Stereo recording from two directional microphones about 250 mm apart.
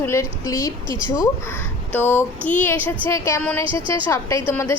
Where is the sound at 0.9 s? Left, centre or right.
Centre.